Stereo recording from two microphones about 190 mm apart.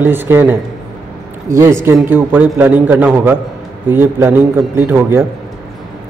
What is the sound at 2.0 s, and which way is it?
A man's voice, 10° right (ahead or behind).